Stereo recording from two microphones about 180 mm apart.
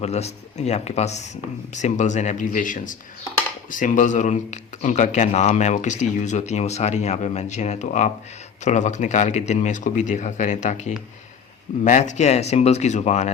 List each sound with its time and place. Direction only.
0.0 s speech: 35° left (ahead or behind)